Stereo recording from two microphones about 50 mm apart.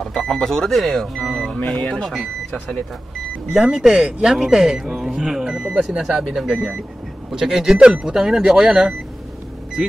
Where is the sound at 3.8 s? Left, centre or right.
Centre.